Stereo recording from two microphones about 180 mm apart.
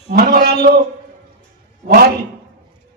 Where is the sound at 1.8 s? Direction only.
55° right (ahead or behind).